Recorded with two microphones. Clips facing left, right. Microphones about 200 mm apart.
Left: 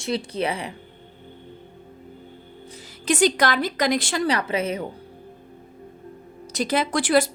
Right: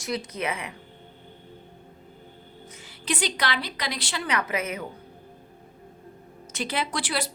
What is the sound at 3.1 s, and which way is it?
A woman's voice, 45° left (ahead or behind).